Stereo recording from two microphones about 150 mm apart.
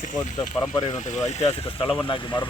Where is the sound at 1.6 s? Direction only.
35° left (ahead or behind).